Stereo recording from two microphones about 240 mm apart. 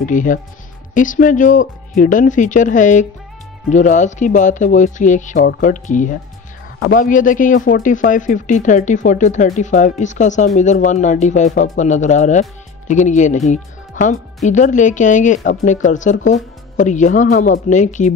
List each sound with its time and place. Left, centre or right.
0.0 s speech: left